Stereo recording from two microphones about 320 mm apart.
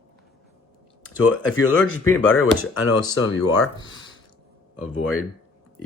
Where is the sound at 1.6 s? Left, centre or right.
Left.